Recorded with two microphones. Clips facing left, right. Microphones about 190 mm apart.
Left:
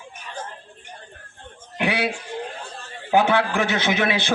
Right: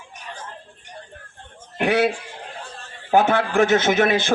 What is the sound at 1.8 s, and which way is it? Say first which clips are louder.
Speech: right 5 dB; 50° right (ahead or behind).